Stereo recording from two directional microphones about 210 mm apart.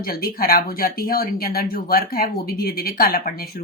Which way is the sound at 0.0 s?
45° left (ahead or behind).